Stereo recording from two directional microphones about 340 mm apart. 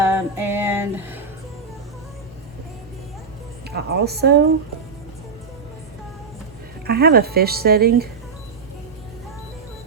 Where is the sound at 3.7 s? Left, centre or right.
Right.